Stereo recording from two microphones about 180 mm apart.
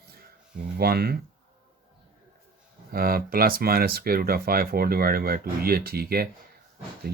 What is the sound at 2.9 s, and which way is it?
Speech, 55° right (ahead or behind).